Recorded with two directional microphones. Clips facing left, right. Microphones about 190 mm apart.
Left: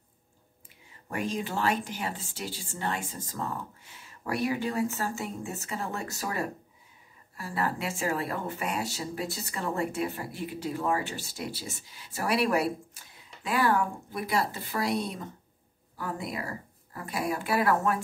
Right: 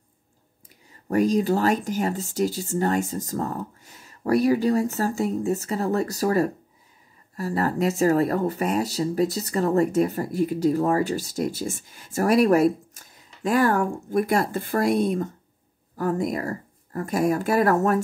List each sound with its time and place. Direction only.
1.1 s speech: 40° right (ahead or behind)